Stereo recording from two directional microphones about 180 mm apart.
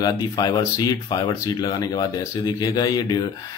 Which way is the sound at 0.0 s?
20° left (ahead or behind).